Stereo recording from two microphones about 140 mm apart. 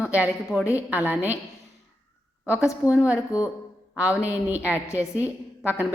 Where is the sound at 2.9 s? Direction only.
5° right (ahead or behind).